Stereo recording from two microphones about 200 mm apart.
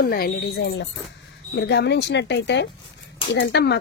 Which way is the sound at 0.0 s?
50° left (ahead or behind).